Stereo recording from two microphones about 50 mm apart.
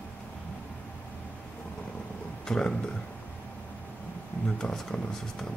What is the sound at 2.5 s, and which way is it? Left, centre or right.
Speech, centre.